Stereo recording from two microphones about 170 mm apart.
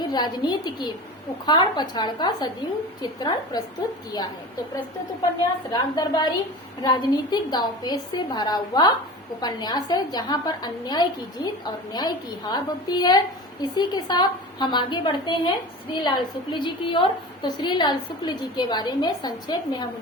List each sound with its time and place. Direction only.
0.0 s a woman's voice: 25° left (ahead or behind)
5.7 s a woman's voice: 25° left (ahead or behind)